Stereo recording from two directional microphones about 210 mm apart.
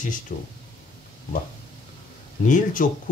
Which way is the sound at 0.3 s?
40° left (ahead or behind).